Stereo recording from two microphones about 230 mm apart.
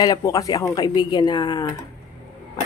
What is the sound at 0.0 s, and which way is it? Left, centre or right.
Speech, centre.